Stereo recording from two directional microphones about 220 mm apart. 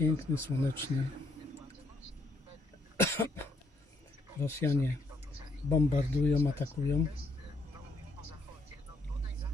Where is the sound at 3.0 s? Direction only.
10° left (ahead or behind).